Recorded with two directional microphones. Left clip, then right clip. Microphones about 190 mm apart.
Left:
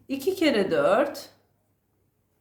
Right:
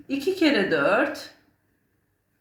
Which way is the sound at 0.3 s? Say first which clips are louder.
Right 1 dB; 20° left (ahead or behind).